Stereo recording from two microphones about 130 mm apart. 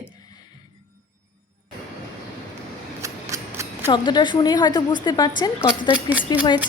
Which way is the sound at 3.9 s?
35° left (ahead or behind).